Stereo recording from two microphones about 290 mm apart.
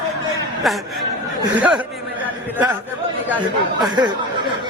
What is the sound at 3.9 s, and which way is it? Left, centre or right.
Speech, centre.